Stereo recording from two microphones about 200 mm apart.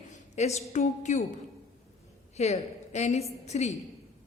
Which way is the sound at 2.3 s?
35° left (ahead or behind).